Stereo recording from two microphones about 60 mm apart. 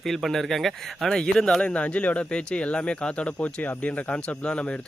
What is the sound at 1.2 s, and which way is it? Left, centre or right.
Speech, centre.